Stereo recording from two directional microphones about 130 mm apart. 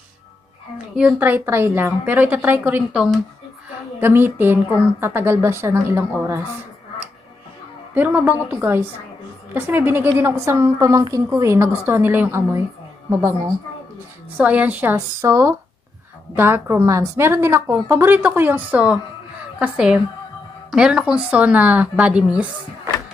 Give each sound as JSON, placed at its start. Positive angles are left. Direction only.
{"t": 0.9, "sound": "a woman's voice", "side_deg": -10}
{"t": 4.0, "sound": "a woman's voice", "side_deg": -15}
{"t": 7.9, "sound": "a woman's voice", "side_deg": -10}
{"t": 14.3, "sound": "a woman's voice", "side_deg": -10}